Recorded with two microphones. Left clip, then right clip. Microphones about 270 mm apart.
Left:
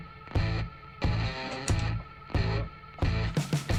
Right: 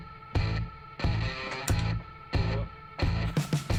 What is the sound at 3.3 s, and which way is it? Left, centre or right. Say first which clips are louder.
Music: even; centre.